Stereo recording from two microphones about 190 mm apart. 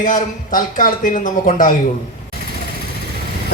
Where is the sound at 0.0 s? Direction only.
45° left (ahead or behind).